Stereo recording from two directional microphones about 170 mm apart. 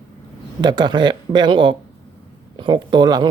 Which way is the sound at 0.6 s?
25° right (ahead or behind).